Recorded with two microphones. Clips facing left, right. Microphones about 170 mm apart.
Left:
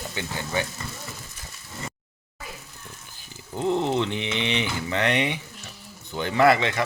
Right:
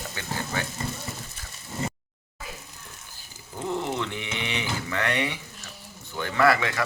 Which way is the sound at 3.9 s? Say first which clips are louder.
Left 5 dB; 25° left (ahead or behind).